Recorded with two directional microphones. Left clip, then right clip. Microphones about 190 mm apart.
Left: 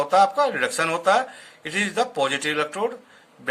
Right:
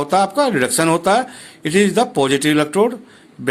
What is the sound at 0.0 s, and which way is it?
Speech, 40° right (ahead or behind).